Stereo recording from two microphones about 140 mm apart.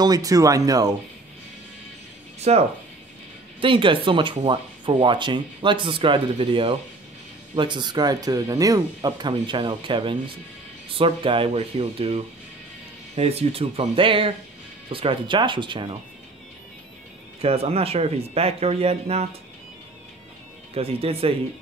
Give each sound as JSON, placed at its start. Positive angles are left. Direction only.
{"t": 0.0, "sound": "speech", "side_deg": -25}
{"t": 2.5, "sound": "speech", "side_deg": -50}
{"t": 3.6, "sound": "speech", "side_deg": -35}
{"t": 17.4, "sound": "speech", "side_deg": -45}
{"t": 20.7, "sound": "speech", "side_deg": -45}